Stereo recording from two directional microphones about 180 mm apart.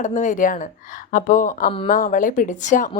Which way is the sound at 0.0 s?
40° left (ahead or behind).